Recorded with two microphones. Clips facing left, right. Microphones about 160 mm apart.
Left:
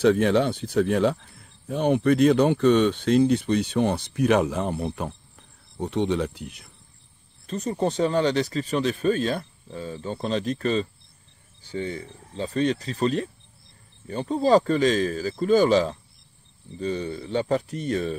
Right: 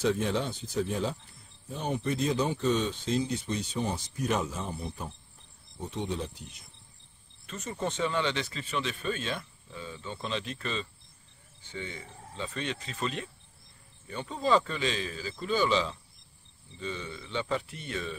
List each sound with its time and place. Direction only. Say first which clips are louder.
0.0 s speech: left 9 dB; 65° left (ahead or behind)
7.4 s speech: left 9 dB; 35° left (ahead or behind)